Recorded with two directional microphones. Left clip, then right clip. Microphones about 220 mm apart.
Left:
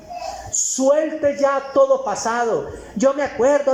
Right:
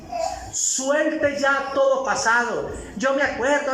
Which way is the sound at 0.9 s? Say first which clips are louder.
Left 4 dB; 20° left (ahead or behind).